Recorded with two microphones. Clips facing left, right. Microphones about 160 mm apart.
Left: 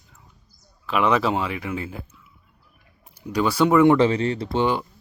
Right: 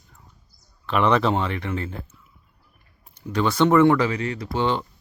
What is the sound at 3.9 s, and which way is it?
Speech, 30° left (ahead or behind).